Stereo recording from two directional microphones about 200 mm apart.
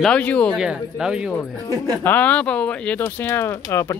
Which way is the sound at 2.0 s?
10° left (ahead or behind).